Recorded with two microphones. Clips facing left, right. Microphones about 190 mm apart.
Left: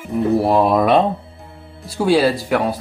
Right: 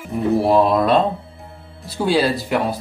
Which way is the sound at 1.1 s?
Centre (ahead or behind).